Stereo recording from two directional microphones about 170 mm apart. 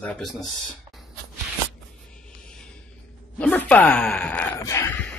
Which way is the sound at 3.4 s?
10° left (ahead or behind).